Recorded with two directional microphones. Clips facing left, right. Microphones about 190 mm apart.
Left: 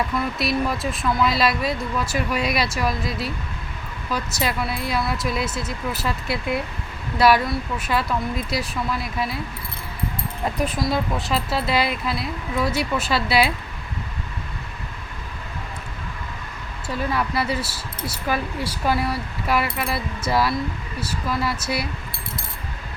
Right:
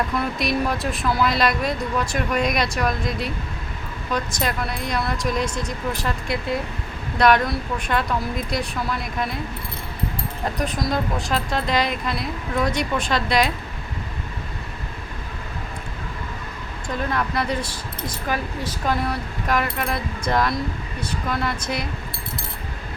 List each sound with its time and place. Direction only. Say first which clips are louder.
0.3 s speech: even; centre (ahead or behind)
10.6 s speech: left 1 dB; 5° left (ahead or behind)
17.1 s speech: left 1 dB; 5° left (ahead or behind)